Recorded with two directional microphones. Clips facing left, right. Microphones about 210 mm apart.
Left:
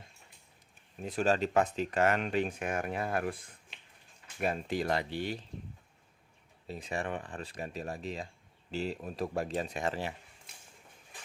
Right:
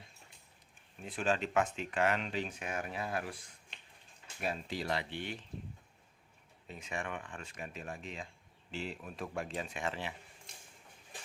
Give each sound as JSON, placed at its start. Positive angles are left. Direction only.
{"t": 1.0, "sound": "speech", "side_deg": 40}
{"t": 3.7, "sound": "finger snapping", "side_deg": 0}
{"t": 4.4, "sound": "speech", "side_deg": 50}
{"t": 6.7, "sound": "speech", "side_deg": 35}